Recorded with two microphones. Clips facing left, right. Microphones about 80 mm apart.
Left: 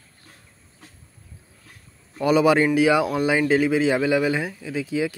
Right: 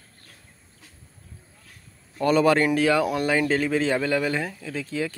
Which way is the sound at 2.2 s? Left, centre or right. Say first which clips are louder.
Left 2 dB; centre.